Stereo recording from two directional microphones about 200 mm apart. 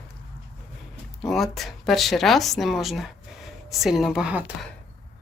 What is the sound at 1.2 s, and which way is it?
Speech, centre (ahead or behind).